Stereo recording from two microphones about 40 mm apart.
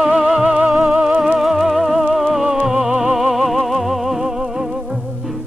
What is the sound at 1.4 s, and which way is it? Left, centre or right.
Music, centre.